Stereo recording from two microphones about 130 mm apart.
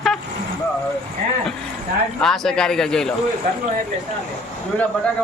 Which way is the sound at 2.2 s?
5° left (ahead or behind).